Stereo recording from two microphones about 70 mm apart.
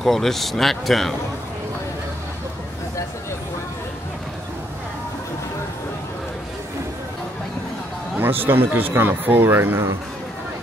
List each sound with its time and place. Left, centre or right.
0.0 s speech: centre
8.2 s speech: right